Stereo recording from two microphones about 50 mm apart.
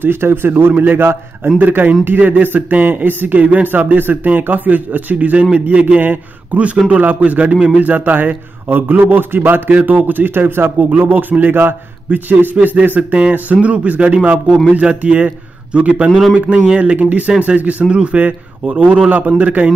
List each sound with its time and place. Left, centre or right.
0.0 s a man's voice: right
5.9 s a man's voice: right